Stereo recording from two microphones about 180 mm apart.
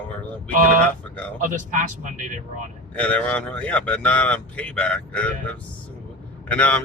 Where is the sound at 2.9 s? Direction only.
5° left (ahead or behind).